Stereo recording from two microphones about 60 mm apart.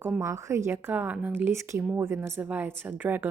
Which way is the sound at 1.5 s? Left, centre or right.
Right.